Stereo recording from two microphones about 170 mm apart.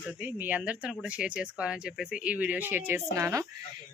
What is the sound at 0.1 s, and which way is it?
Speech, 10° right (ahead or behind).